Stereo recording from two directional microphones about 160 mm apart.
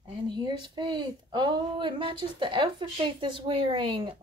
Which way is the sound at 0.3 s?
30° right (ahead or behind).